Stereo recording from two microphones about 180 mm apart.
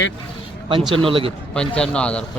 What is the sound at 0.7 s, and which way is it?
Speech, 30° right (ahead or behind).